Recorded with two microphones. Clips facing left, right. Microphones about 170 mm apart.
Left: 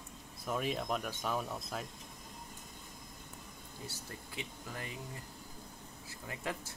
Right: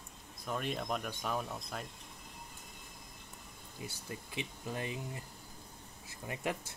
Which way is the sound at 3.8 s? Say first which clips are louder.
Right 3 dB; 15° right (ahead or behind).